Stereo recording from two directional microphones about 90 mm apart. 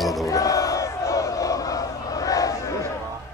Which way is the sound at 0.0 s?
Centre (ahead or behind).